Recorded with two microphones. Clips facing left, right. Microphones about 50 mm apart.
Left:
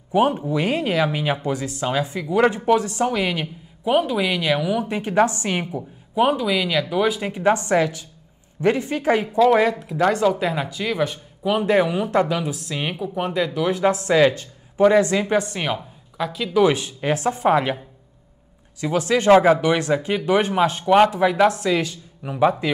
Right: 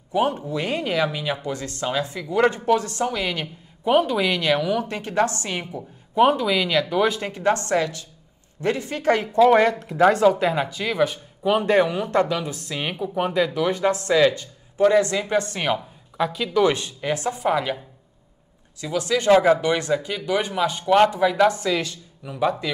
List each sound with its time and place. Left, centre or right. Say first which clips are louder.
0.1 s speech: left 3 dB; centre
5.7 s speech: left 4 dB; centre
15.6 s speech: right 2 dB; centre
17.0 s speech: left 4 dB; left; by 21.6 s centre
21.6 s speech: left 3 dB; centre